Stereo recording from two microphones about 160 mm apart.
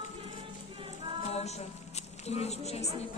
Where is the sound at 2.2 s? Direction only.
40° left (ahead or behind).